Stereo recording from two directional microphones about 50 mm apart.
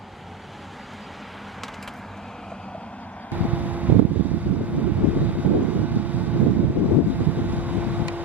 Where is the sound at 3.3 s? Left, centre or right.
Right.